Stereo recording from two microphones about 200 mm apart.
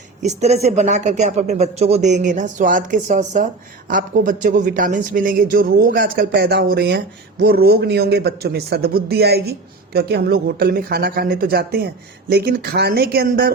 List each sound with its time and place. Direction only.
0.2 s speech: 35° right (ahead or behind)